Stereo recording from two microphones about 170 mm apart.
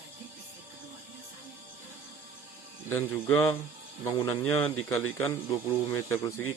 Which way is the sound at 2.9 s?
10° left (ahead or behind).